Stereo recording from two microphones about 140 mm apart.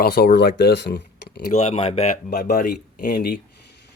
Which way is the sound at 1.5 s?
50° left (ahead or behind).